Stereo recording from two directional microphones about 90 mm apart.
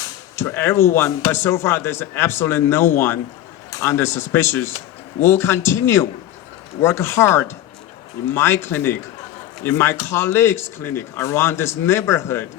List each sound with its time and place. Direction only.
0.3 s speech: 25° left (ahead or behind)